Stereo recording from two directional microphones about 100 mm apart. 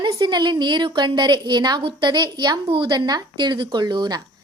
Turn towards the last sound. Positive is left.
turn(degrees=-50)  # may be behind; listen again after turning